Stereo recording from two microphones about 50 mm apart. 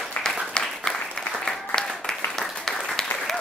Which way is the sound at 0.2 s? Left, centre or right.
Centre.